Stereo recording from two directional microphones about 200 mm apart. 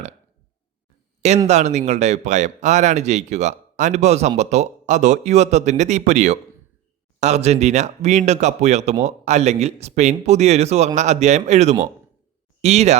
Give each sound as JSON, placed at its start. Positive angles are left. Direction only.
{"t": 1.5, "sound": "speech", "side_deg": -35}